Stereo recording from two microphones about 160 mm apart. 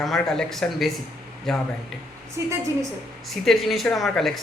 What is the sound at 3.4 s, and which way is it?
Speech, centre (ahead or behind).